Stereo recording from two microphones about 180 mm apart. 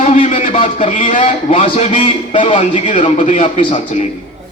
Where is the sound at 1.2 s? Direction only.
30° left (ahead or behind).